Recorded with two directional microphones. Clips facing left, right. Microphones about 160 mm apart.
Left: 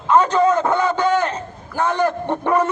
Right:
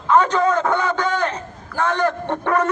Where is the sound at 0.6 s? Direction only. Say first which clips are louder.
Left 3 dB; 10° left (ahead or behind).